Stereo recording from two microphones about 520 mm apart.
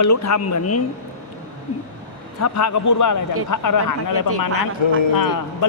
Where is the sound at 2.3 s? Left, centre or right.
Left.